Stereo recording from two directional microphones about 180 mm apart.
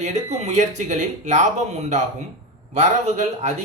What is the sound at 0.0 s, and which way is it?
Speech, 40° right (ahead or behind).